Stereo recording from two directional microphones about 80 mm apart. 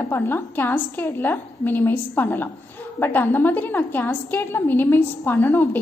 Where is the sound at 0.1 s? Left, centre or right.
Left.